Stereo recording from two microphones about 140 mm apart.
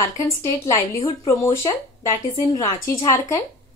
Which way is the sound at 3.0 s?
25° left (ahead or behind).